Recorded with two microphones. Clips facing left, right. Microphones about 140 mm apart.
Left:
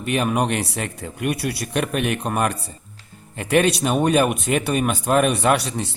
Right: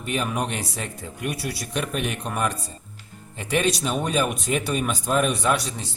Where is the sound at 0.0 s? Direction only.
65° left (ahead or behind).